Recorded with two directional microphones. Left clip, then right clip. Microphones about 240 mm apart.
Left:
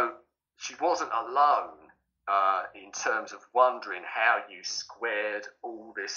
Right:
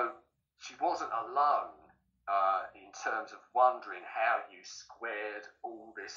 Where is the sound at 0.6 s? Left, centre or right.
Left.